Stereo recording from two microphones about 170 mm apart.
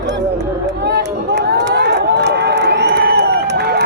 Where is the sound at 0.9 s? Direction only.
85° right.